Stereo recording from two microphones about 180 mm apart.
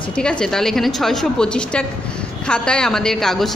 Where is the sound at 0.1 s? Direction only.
5° left (ahead or behind).